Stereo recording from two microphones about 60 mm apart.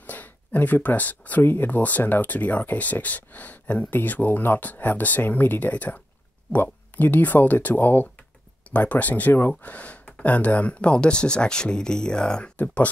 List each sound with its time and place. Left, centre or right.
0.0 s speech: left